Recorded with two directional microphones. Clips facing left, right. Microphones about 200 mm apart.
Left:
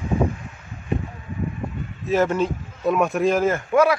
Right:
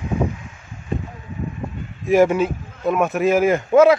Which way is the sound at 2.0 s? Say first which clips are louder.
Right 5 dB; 10° right (ahead or behind).